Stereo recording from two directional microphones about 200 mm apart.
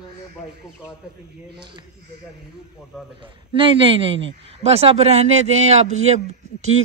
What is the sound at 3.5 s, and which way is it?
A man's voice, 25° right (ahead or behind).